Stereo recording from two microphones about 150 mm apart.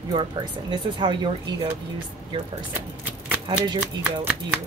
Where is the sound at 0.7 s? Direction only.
30° right (ahead or behind).